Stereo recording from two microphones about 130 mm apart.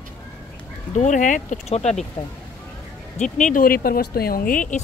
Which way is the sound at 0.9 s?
70° left (ahead or behind).